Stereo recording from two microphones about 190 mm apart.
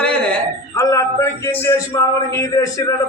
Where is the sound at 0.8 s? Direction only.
15° left (ahead or behind).